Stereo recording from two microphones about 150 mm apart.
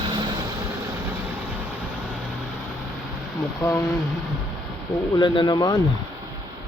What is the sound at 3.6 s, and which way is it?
Speech, 20° left (ahead or behind).